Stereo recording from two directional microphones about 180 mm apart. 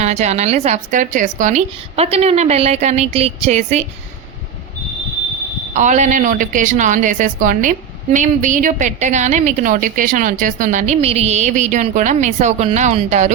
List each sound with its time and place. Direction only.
0.0 s a woman's voice: 40° right (ahead or behind)
5.7 s a woman's voice: 40° right (ahead or behind)